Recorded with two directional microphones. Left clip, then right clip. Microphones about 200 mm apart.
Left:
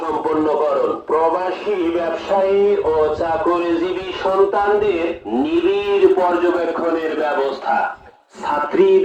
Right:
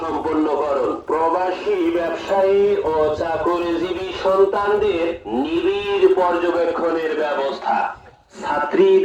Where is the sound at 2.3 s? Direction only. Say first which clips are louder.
Left 1 dB; 35° right (ahead or behind).